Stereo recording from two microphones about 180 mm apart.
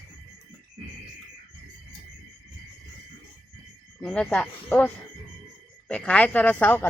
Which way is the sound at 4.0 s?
5° left (ahead or behind).